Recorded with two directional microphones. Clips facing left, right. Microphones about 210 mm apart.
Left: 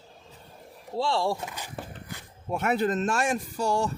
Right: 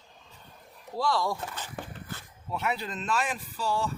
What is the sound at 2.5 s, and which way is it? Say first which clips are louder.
Speech: left 7 dB; 50° left (ahead or behind).